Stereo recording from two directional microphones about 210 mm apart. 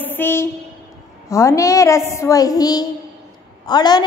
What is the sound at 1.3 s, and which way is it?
A woman's voice, 15° left (ahead or behind).